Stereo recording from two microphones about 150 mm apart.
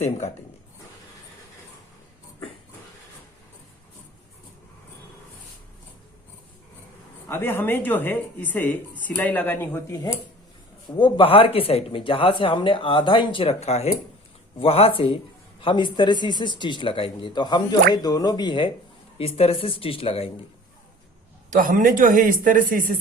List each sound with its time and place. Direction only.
7.3 s speech: 15° left (ahead or behind)
10.9 s speech: 35° left (ahead or behind)
21.6 s speech: 65° right (ahead or behind)